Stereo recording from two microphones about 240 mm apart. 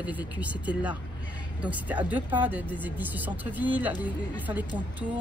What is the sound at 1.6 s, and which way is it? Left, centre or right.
Speech, centre.